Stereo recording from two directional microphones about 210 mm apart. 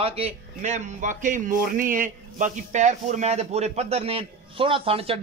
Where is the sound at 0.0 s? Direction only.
30° right (ahead or behind).